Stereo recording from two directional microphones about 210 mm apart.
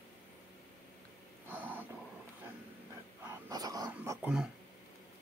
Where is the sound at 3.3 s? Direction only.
15° right (ahead or behind).